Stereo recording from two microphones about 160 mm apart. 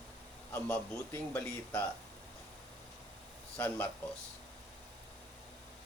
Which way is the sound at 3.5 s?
15° left (ahead or behind).